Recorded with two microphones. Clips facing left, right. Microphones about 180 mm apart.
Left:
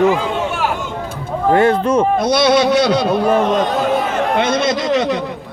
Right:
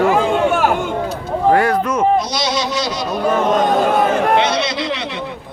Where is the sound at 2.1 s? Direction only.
55° left (ahead or behind).